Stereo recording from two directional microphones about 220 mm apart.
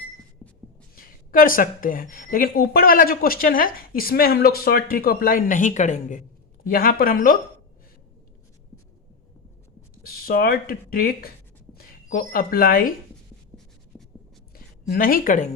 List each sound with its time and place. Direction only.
0.4 s heart sounds: centre (ahead or behind)
0.9 s a woman's voice: 40° left (ahead or behind)
9.9 s speech: 45° left (ahead or behind)
13.9 s writing: 5° left (ahead or behind)
14.8 s a woman's voice: 40° left (ahead or behind)